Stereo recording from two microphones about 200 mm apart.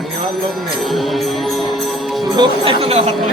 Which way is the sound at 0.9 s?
Centre (ahead or behind).